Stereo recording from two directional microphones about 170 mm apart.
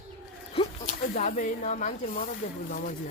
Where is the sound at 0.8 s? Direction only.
50° left (ahead or behind).